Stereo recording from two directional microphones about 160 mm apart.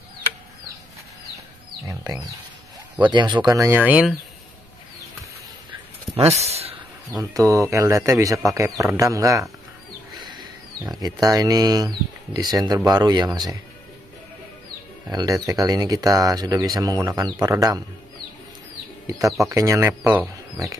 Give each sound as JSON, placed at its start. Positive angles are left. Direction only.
{"t": 1.9, "sound": "speech", "side_deg": -25}
{"t": 6.1, "sound": "speech", "side_deg": -40}
{"t": 7.2, "sound": "speech", "side_deg": -20}
{"t": 10.2, "sound": "wild animals", "side_deg": -25}
{"t": 11.0, "sound": "speech", "side_deg": -25}
{"t": 15.0, "sound": "speech", "side_deg": -25}
{"t": 19.0, "sound": "speech", "side_deg": -20}